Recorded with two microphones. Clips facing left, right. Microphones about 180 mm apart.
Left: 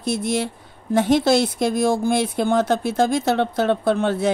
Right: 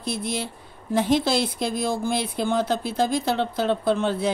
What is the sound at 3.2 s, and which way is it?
Speech, 65° left (ahead or behind).